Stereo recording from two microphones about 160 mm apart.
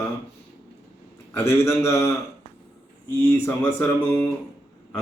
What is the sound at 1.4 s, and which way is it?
Speech, 15° left (ahead or behind).